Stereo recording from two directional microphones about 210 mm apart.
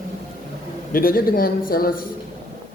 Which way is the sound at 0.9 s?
45° left (ahead or behind).